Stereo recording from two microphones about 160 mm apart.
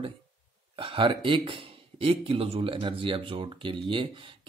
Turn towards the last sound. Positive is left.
turn(degrees=-30)  # may be behind; listen again after turning